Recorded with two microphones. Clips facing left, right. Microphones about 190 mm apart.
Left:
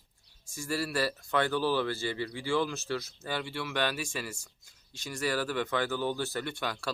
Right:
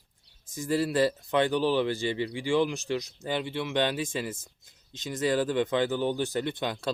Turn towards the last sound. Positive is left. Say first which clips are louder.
# right 5 dB
turn(degrees=-20)  # may be behind; listen again after turning